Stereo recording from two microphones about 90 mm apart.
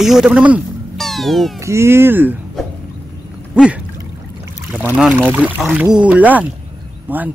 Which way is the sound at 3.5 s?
10° right (ahead or behind).